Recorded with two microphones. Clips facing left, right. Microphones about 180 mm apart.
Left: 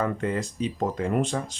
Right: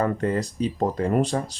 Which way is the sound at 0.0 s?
40° right (ahead or behind).